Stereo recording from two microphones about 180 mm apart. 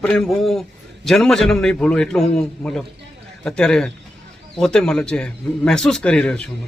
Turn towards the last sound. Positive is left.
turn(degrees=5)  # may be behind; listen again after turning